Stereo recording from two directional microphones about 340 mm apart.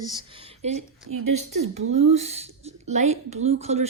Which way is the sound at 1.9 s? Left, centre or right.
Centre.